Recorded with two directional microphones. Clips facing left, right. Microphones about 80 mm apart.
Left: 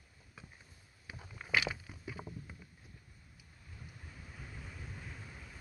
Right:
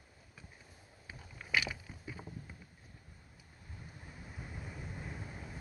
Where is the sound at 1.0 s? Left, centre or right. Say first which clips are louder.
Left 1 dB; centre.